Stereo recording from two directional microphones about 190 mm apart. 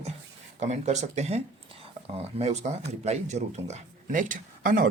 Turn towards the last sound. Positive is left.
turn(degrees=-45)  # may be behind; listen again after turning